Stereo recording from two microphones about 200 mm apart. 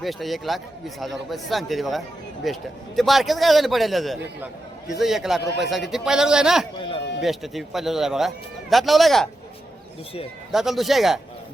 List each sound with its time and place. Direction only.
0.0 s a man's voice: centre (ahead or behind)
6.7 s a sound: 25° left (ahead or behind)
7.2 s a man's voice: centre (ahead or behind)
10.5 s a man's voice: centre (ahead or behind)